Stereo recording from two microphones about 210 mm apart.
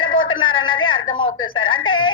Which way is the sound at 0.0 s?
70° left (ahead or behind).